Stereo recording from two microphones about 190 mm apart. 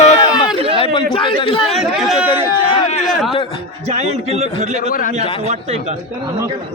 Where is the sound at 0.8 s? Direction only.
25° left (ahead or behind).